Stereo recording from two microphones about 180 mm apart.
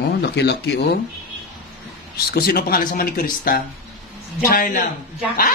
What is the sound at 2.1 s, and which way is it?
Speech, 60° left (ahead or behind).